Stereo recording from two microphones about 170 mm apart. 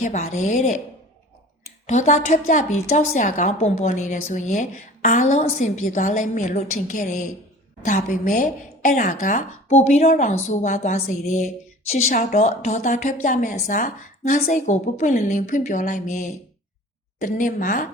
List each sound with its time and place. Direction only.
0.0 s a woman's voice: 45° left (ahead or behind)
1.9 s a woman's voice: 45° left (ahead or behind)